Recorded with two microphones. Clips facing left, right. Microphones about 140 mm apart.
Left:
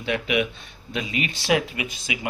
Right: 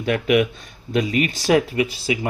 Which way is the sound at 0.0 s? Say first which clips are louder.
Right 6 dB; 45° right (ahead or behind).